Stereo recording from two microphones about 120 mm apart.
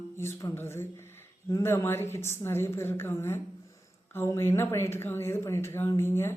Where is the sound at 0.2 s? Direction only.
25° left (ahead or behind).